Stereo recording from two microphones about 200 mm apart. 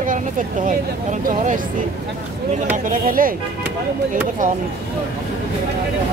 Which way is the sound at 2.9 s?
45° right (ahead or behind).